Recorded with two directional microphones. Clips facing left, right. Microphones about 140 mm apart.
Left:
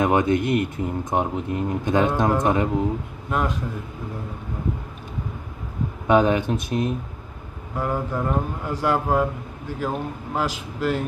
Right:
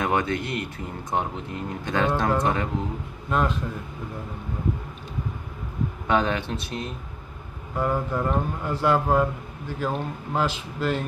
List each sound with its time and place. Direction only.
0.0 s speech: 20° left (ahead or behind)
3.3 s a man's voice: 10° left (ahead or behind)
6.0 s speech: 15° left (ahead or behind)